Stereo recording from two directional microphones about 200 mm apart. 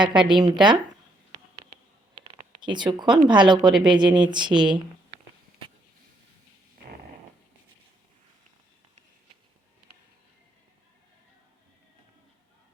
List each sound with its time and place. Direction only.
0.0 s a woman's voice: 25° right (ahead or behind)
2.2 s a sound: 25° right (ahead or behind)
3.2 s a woman's voice: 25° right (ahead or behind)